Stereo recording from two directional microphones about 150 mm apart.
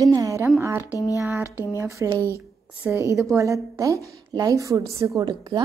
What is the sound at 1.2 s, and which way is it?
A woman's voice, 20° right (ahead or behind).